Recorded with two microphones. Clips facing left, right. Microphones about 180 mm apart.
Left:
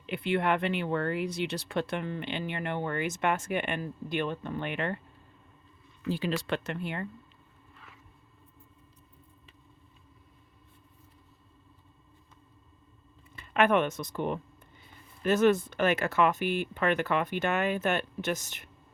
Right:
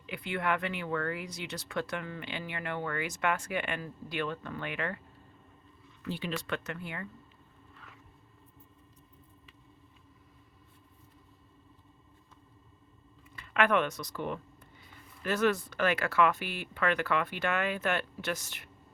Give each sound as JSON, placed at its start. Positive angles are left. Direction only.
{"t": 0.1, "sound": "speech", "side_deg": 25}
{"t": 6.1, "sound": "speech", "side_deg": 40}
{"t": 13.3, "sound": "speech", "side_deg": 25}